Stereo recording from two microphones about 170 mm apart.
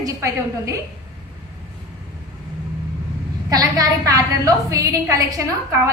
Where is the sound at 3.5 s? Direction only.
20° right (ahead or behind).